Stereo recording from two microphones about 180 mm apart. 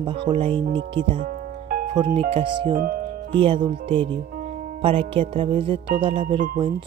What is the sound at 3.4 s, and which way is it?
Speech, 30° right (ahead or behind).